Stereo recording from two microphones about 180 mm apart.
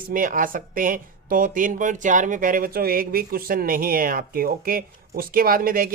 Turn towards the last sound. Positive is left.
turn(degrees=-55)  # may be behind; listen again after turning